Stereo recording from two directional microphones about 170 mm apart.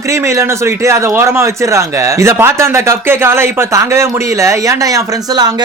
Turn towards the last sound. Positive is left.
turn(degrees=-20)  # may be behind; listen again after turning